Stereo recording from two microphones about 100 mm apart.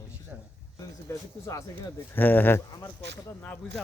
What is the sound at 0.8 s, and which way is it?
Speech, 30° left (ahead or behind).